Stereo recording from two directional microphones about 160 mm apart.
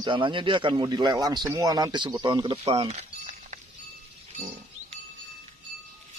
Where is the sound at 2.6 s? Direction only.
40° right (ahead or behind).